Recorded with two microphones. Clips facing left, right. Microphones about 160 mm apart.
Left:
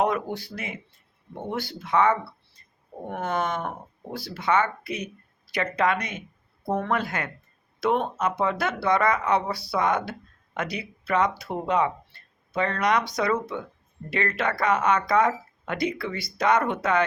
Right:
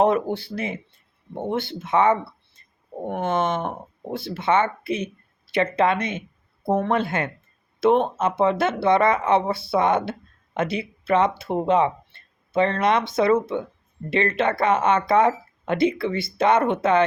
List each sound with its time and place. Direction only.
0.0 s speech: 30° right (ahead or behind)